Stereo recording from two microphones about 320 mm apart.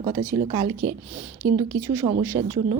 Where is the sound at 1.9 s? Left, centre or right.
Centre.